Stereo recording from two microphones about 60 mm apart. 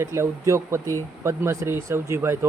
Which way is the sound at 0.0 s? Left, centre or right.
Right.